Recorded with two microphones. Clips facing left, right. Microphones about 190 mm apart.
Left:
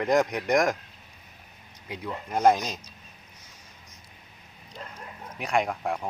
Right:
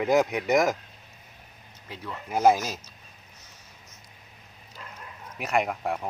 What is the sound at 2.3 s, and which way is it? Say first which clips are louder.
Speech: right 1 dB; 5° right (ahead or behind).